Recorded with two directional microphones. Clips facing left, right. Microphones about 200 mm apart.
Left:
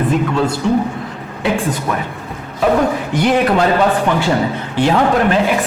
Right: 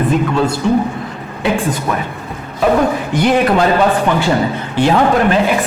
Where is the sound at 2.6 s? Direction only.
15° right (ahead or behind).